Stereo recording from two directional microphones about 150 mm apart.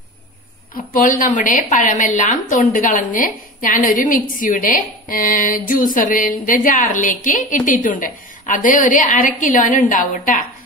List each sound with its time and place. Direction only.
1.0 s a woman's voice: 65° left (ahead or behind)